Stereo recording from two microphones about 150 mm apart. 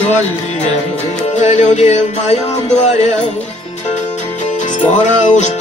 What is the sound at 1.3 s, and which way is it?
Music, 50° left (ahead or behind).